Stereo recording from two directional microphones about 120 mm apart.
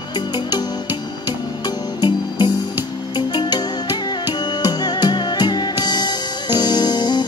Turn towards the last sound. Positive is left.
turn(degrees=35)  # may be behind; listen again after turning